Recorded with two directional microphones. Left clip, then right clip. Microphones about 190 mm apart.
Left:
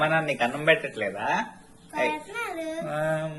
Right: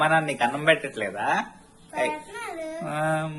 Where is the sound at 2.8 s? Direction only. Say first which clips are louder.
Right 2 dB; 35° right (ahead or behind).